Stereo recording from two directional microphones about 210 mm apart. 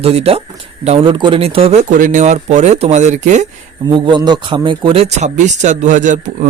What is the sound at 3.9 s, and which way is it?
Speech, 20° right (ahead or behind).